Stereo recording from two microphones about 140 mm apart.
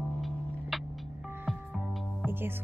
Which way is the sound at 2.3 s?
15° right (ahead or behind).